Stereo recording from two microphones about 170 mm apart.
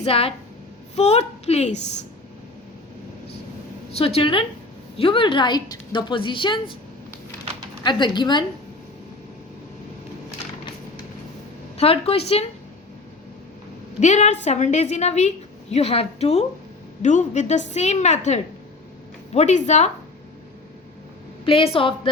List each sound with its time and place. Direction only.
0.0 s a woman's voice: 35° left (ahead or behind)
3.9 s a woman's voice: 35° left (ahead or behind)
7.9 s a woman's voice: 25° left (ahead or behind)
11.8 s a woman's voice: 35° left (ahead or behind)
14.0 s a woman's voice: 45° left (ahead or behind)
21.4 s a woman's voice: 30° left (ahead or behind)